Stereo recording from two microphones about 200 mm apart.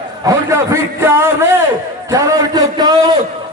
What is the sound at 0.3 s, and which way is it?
Speech, 15° right (ahead or behind).